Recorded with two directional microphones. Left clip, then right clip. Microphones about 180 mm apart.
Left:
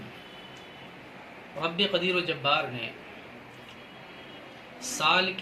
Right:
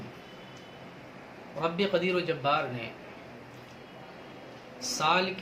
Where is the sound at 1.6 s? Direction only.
15° right (ahead or behind).